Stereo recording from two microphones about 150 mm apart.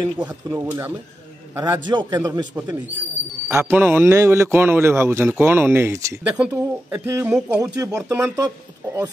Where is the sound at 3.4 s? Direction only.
15° right (ahead or behind).